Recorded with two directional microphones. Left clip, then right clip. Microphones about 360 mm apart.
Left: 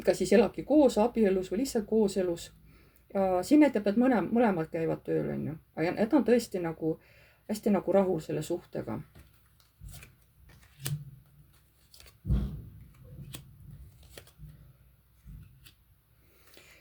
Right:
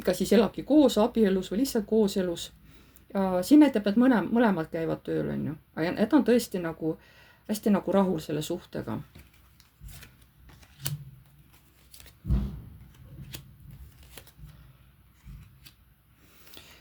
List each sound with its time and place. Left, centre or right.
0.0 s speech: right